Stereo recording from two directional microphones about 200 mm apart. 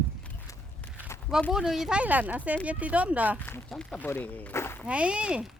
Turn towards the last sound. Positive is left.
turn(degrees=-5)  # may be behind; listen again after turning